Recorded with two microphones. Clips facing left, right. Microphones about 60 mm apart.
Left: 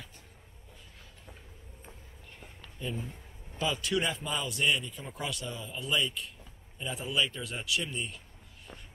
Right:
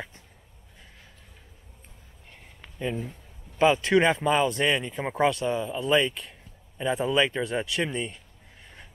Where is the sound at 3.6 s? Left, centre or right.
Right.